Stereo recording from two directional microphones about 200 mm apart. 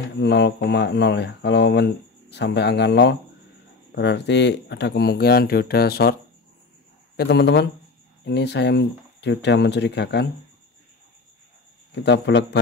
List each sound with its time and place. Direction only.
0.2 s speech: 60° left (ahead or behind)
7.2 s speech: 60° left (ahead or behind)
11.9 s speech: 60° left (ahead or behind)